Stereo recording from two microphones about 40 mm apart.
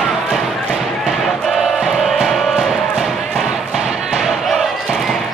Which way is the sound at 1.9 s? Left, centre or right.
Centre.